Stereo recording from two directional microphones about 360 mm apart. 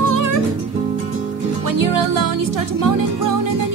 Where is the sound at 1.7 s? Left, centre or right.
Right.